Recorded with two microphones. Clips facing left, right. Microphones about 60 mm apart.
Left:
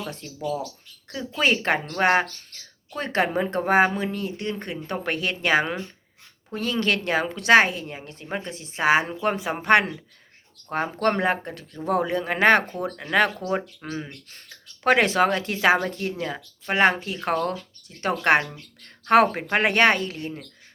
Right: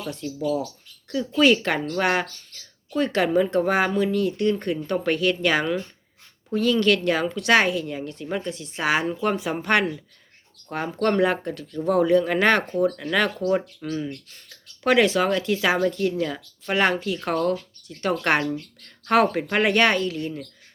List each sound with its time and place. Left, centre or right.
0.0 s speech: left
1.4 s speech: left